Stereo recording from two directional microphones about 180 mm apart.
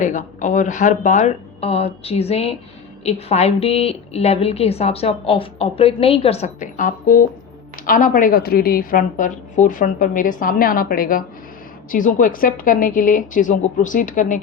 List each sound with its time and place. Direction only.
0.0 s a woman's voice: 45° left (ahead or behind)